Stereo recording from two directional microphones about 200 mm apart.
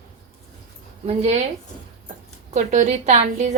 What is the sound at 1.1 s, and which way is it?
Speech, 30° right (ahead or behind).